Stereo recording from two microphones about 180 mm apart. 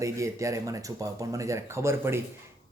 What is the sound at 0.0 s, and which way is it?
Speech, 15° right (ahead or behind).